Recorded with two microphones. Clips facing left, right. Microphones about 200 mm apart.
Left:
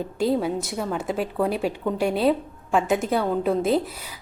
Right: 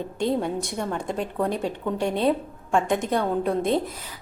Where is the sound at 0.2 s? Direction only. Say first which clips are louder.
Left 2 dB; 5° left (ahead or behind).